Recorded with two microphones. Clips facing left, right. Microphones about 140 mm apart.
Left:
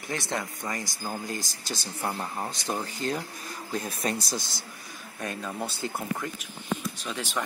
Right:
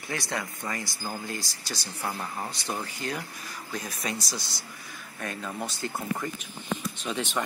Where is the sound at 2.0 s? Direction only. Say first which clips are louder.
Left 1 dB; 20° left (ahead or behind).